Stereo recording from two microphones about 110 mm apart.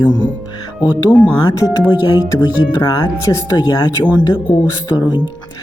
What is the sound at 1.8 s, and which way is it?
Speech, 40° left (ahead or behind).